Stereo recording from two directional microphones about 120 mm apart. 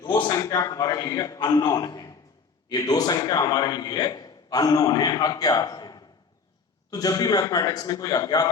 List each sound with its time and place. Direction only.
0.0 s a man's voice: 40° left (ahead or behind)